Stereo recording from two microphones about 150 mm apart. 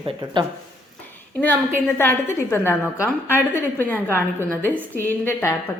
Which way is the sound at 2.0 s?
15° left (ahead or behind).